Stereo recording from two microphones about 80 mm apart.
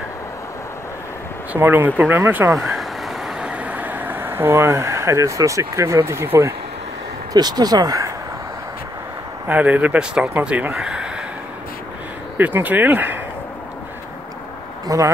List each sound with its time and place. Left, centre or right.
1.5 s speech: right
2.5 s vehicle: centre
3.4 s speech: centre; by 6.5 s right
7.3 s speech: right
9.5 s speech: centre
12.4 s speech: right
14.9 s speech: right